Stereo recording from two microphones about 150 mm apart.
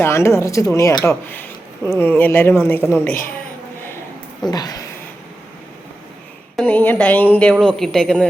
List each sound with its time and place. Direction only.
0.0 s speech: 20° left (ahead or behind)
4.4 s speech: 25° left (ahead or behind)
6.6 s speech: 10° left (ahead or behind)